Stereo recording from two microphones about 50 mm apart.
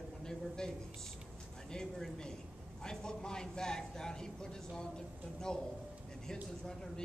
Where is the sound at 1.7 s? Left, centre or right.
Centre.